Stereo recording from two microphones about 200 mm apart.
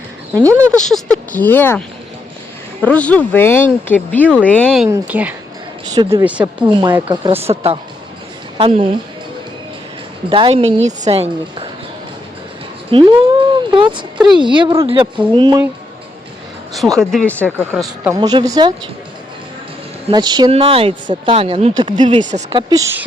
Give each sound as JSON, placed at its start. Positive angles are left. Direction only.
{"t": 0.3, "sound": "speech", "side_deg": -15}
{"t": 0.8, "sound": "speech", "side_deg": 0}
{"t": 2.8, "sound": "speech", "side_deg": 5}
{"t": 4.9, "sound": "speech", "side_deg": -5}
{"t": 5.9, "sound": "speech", "side_deg": -20}
{"t": 10.2, "sound": "speech", "side_deg": -25}
{"t": 12.9, "sound": "speech", "side_deg": -25}
{"t": 17.0, "sound": "speech", "side_deg": 0}
{"t": 17.7, "sound": "speech", "side_deg": -10}
{"t": 18.2, "sound": "speech", "side_deg": -20}
{"t": 20.1, "sound": "speech", "side_deg": -20}
{"t": 22.2, "sound": "speech", "side_deg": -35}
{"t": 22.5, "sound": "speech", "side_deg": -15}